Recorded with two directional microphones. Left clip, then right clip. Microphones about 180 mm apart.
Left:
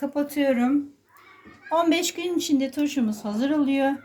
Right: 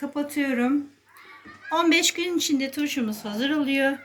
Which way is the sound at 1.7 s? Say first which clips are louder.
Right 1 dB; 40° left (ahead or behind).